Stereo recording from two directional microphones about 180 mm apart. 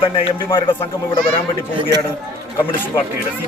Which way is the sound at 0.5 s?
30° left (ahead or behind).